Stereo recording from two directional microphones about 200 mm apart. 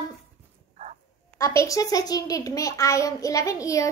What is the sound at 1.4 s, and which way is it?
A child's voice, 15° left (ahead or behind).